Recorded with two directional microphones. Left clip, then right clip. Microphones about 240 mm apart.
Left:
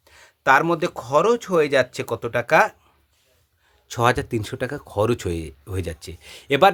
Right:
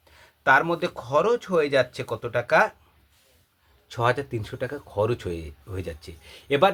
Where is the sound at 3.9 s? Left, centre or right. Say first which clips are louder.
Left 4 dB; left.